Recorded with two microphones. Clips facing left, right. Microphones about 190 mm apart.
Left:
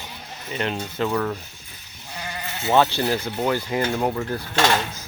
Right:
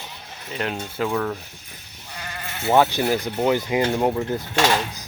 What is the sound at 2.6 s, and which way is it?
Speech, 10° right (ahead or behind).